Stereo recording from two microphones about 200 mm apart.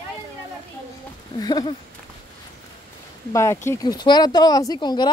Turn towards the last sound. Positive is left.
turn(degrees=20)  # may be behind; listen again after turning